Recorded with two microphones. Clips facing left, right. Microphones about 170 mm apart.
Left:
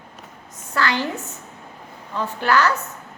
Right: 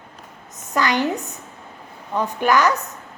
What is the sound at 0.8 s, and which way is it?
Speech, 15° right (ahead or behind).